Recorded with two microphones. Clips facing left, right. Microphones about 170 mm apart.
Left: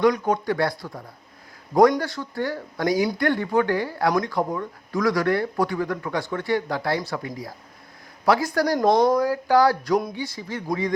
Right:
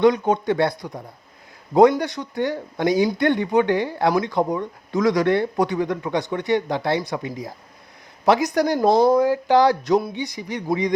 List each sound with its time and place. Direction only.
0.0 s speech: 25° right (ahead or behind)
8.8 s speech: 5° right (ahead or behind)
9.0 s speech: 25° right (ahead or behind)